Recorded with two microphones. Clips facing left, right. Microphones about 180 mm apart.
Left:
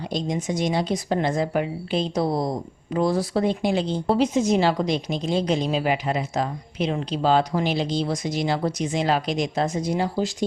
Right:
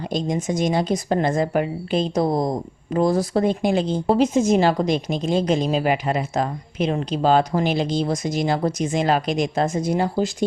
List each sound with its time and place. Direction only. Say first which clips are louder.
0.0 s a woman's voice: right 3 dB; 50° right (ahead or behind)